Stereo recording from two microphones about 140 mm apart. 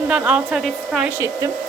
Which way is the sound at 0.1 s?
10° right (ahead or behind).